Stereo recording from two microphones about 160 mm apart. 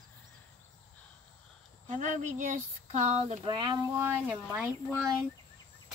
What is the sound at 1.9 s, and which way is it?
Speech, 50° right (ahead or behind).